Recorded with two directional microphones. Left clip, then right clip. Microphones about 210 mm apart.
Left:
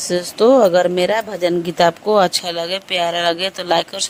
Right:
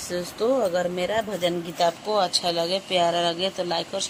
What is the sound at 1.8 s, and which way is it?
Speech, 55° left (ahead or behind).